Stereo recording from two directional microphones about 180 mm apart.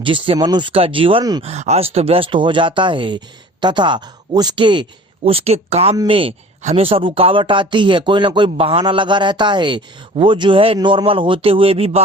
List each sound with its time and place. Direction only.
0.0 s speech: 30° right (ahead or behind)
1.5 s speech: 35° right (ahead or behind)